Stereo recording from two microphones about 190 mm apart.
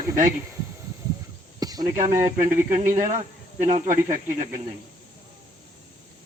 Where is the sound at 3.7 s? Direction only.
40° right (ahead or behind).